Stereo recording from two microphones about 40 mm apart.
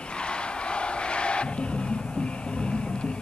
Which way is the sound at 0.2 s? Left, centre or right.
Left.